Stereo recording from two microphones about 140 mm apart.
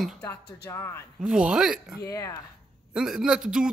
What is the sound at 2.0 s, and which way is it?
Speech, 20° left (ahead or behind).